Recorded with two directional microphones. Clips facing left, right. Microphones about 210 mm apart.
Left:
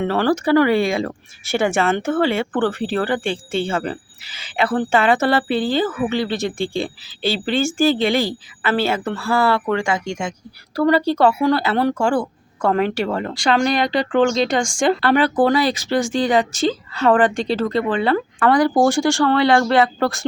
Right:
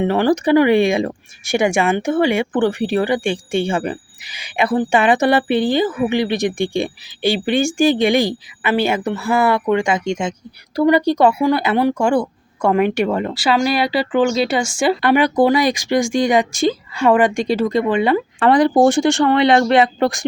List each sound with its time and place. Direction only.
0.0 s speech: 15° right (ahead or behind)
13.3 s speech: 5° right (ahead or behind)